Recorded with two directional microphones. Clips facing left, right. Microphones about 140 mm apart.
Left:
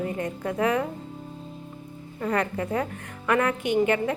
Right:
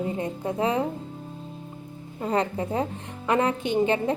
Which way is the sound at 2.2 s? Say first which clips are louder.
Right 1 dB; 25° right (ahead or behind).